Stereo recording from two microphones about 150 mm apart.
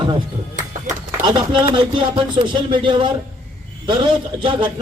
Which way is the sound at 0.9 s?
60° right (ahead or behind).